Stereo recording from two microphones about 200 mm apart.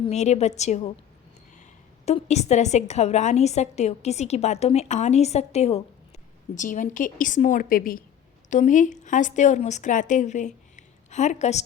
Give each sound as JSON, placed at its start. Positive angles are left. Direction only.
{"t": 0.0, "sound": "a woman's voice", "side_deg": 35}
{"t": 2.0, "sound": "a woman's voice", "side_deg": 35}